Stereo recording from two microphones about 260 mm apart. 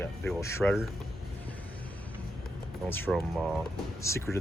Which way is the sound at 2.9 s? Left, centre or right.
Centre.